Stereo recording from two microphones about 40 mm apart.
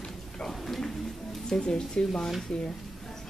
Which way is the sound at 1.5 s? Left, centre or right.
Centre.